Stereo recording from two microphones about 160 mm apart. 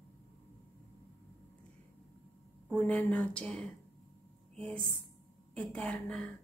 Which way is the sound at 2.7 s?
5° left (ahead or behind).